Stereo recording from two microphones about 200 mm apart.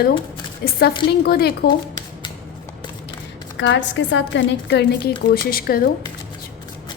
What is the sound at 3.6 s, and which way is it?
A woman's voice, 65° left (ahead or behind).